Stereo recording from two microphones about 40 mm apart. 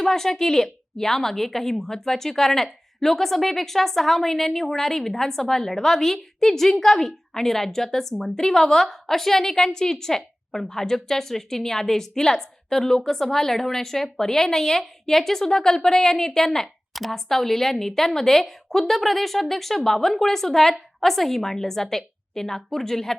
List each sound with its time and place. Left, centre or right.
0.0 s a woman's voice: centre
16.9 s a woman's voice: centre